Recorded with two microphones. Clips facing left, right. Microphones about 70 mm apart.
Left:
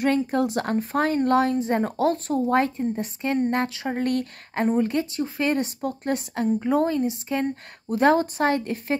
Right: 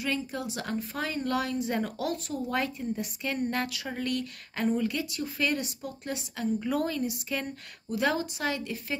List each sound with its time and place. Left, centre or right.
0.0 s a woman's voice: left